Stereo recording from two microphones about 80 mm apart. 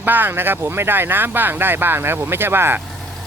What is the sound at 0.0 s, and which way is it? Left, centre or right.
Speech, right.